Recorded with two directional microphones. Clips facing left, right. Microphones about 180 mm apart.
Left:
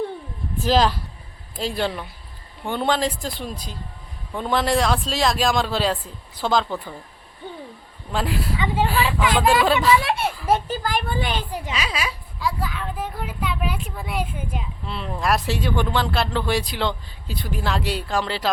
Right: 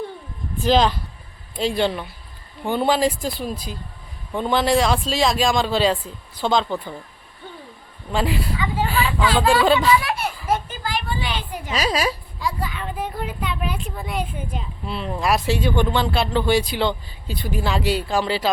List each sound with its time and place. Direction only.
0.6 s speech: 5° left (ahead or behind)
8.1 s speech: centre (ahead or behind)
8.5 s speech: 25° left (ahead or behind)
8.9 s a sound: centre (ahead or behind)
9.2 s speech: 20° left (ahead or behind)
9.6 s speech: centre (ahead or behind)
10.0 s children playing: 25° left (ahead or behind)
10.4 s a sound: 30° left (ahead or behind)
10.8 s a sound: 50° left (ahead or behind)
11.7 s a woman's voice: 40° right (ahead or behind)
12.4 s speech: centre (ahead or behind)